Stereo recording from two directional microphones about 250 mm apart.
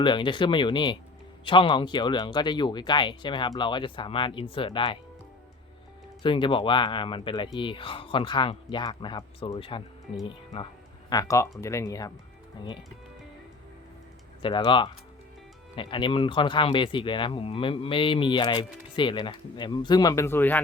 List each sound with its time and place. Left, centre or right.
0.0 s speech: centre
6.2 s speech: centre
14.4 s speech: centre